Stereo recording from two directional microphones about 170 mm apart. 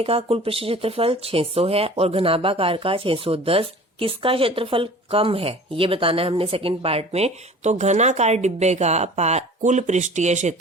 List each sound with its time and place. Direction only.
0.0 s speech: 35° right (ahead or behind)